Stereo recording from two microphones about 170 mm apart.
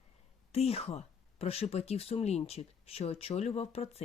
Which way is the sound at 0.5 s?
35° left (ahead or behind).